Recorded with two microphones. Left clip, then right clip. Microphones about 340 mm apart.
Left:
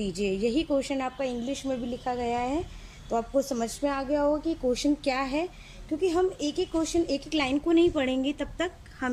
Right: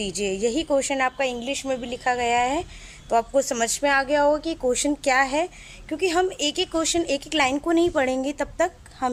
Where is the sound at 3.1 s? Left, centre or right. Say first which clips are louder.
Right 6 dB; right.